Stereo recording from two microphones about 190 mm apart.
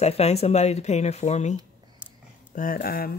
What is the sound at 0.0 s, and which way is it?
Speech, 35° left (ahead or behind).